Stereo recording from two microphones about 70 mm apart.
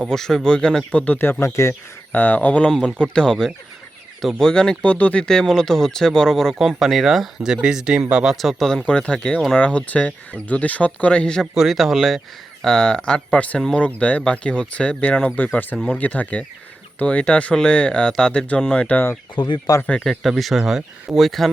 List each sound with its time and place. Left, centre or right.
0.1 s speech: centre
0.9 s speech: left
1.2 s speech: left
2.1 s speech: left
2.6 s speech: centre
6.6 s speech: centre
11.5 s speech: centre
12.6 s speech: centre
19.4 s speech: left
20.1 s speech: centre